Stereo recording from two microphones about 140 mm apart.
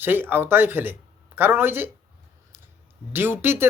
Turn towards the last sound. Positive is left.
turn(degrees=-15)  # may be behind; listen again after turning